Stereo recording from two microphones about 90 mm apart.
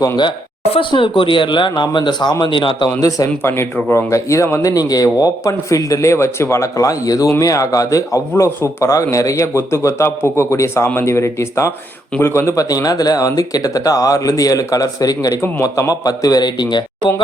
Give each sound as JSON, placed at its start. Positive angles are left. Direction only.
{"t": 0.2, "sound": "speech", "side_deg": 75}
{"t": 3.4, "sound": "speech", "side_deg": 20}
{"t": 3.9, "sound": "speech", "side_deg": 35}
{"t": 12.7, "sound": "a man's voice", "side_deg": 40}